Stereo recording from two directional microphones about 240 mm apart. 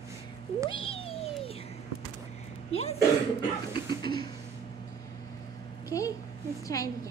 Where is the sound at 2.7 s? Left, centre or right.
Left.